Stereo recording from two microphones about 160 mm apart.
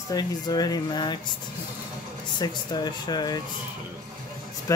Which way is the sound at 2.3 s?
25° left (ahead or behind).